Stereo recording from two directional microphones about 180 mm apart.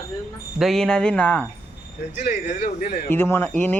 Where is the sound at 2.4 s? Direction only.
40° left (ahead or behind).